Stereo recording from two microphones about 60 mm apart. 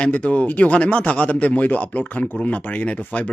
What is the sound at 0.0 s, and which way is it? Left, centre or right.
Speech, left.